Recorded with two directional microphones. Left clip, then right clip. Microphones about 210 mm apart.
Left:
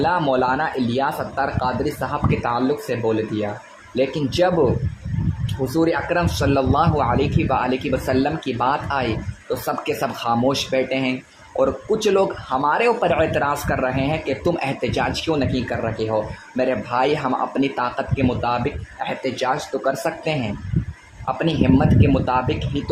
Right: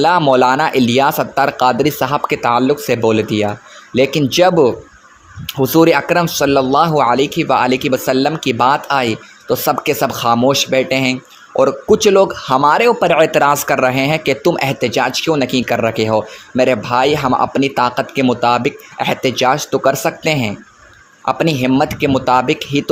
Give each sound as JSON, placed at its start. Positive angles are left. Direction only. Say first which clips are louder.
{"t": 0.0, "sound": "speech", "louder": "right 8 dB", "side_deg": -25}